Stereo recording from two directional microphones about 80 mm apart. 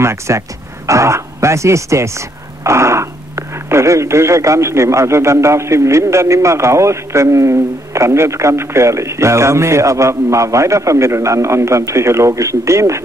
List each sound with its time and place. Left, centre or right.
0.0 s speech: right